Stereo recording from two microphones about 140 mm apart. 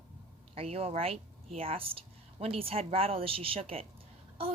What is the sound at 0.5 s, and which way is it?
A woman's voice, 45° right (ahead or behind).